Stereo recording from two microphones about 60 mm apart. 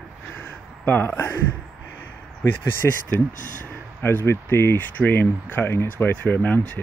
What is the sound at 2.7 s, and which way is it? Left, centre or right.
Speech, left.